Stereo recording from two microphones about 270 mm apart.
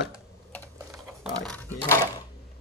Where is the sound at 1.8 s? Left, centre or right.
Centre.